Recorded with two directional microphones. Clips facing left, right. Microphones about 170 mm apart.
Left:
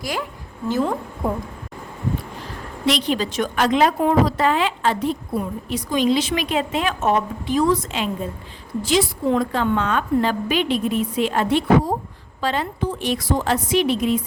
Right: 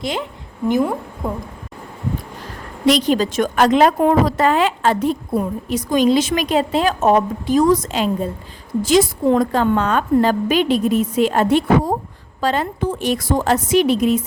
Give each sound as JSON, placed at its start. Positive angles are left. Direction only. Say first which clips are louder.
{"t": 0.0, "sound": "a woman's voice", "louder": "right 3 dB", "side_deg": -25}
{"t": 1.2, "sound": "speech", "louder": "left 1 dB", "side_deg": 5}
{"t": 2.8, "sound": "a woman's voice", "louder": "right 6 dB", "side_deg": -45}